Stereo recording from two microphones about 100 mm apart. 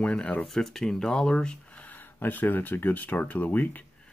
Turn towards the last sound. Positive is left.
turn(degrees=15)  # may be behind; listen again after turning